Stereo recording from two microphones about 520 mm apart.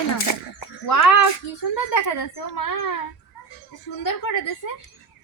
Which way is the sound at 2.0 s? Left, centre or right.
Left.